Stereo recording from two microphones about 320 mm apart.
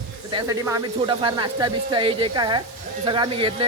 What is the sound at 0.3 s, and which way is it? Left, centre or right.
A man's voice, centre.